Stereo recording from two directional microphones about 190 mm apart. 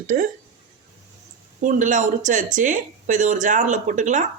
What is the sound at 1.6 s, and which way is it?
Speech, 40° right (ahead or behind).